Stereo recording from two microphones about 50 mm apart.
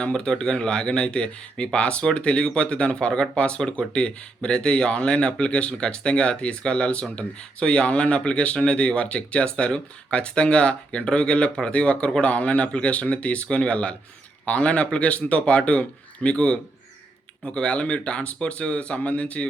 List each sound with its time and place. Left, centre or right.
0.1 s speech: centre